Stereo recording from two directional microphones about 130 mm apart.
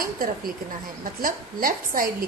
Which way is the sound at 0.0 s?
90° right.